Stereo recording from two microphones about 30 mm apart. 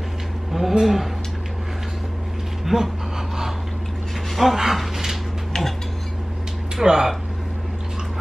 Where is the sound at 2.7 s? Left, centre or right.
Centre.